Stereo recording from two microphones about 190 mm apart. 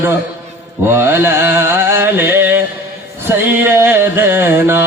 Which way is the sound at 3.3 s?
10° right (ahead or behind).